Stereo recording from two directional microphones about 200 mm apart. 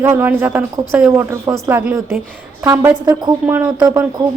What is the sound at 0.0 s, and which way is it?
A woman's voice, 10° right (ahead or behind).